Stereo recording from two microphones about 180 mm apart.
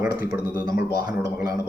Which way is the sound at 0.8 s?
60° left (ahead or behind).